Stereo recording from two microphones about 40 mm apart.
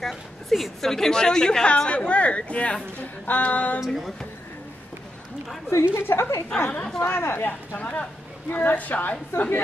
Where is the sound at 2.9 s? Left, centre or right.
Left.